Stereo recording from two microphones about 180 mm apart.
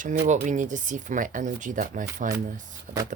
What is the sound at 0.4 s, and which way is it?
Speech, 45° right (ahead or behind).